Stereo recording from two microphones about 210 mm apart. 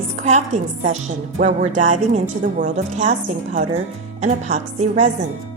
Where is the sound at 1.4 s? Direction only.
35° right (ahead or behind).